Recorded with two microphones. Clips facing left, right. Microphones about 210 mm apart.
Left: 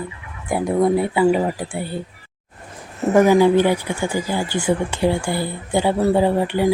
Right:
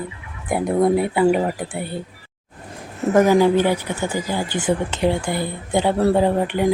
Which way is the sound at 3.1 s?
15° left (ahead or behind).